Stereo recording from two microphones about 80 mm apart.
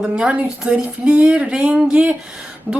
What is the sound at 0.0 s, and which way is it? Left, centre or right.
Speech, centre.